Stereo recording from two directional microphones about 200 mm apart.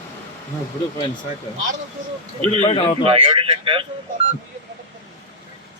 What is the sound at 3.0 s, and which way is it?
Speech, 25° right (ahead or behind).